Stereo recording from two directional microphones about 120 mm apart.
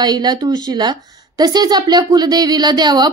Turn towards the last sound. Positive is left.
turn(degrees=-35)  # may be behind; listen again after turning